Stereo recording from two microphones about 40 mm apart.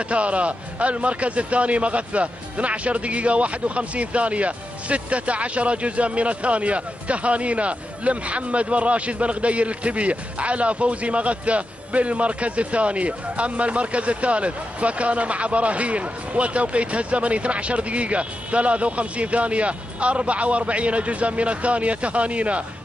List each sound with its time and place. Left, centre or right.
0.0 s a man's voice: right